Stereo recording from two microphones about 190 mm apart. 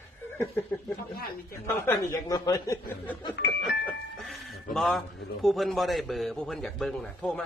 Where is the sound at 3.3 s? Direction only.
60° left (ahead or behind).